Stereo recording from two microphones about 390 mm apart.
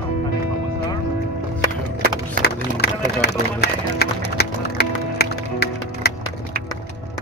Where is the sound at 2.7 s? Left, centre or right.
Left.